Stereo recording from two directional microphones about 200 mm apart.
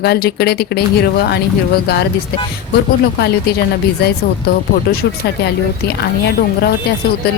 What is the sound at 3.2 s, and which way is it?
Speech, 55° left (ahead or behind).